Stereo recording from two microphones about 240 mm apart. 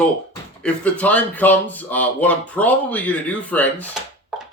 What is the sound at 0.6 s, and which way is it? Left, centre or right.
Speech, centre.